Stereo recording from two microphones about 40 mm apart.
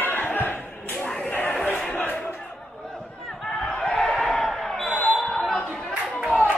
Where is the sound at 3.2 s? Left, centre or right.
Centre.